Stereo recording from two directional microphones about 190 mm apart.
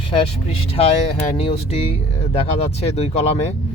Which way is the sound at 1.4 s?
30° left (ahead or behind).